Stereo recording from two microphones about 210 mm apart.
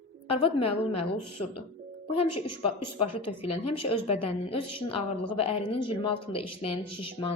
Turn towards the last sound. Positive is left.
turn(degrees=25)  # may be behind; listen again after turning